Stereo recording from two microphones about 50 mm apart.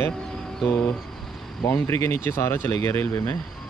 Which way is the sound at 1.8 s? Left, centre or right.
Left.